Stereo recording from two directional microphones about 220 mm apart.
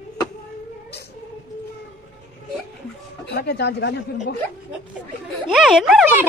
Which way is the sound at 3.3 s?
50° left (ahead or behind).